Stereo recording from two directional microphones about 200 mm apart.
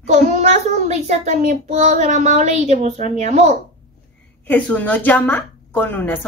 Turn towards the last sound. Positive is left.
turn(degrees=10)  # may be behind; listen again after turning